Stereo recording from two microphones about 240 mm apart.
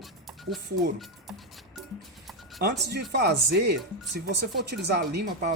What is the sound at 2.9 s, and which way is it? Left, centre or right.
Speech, right.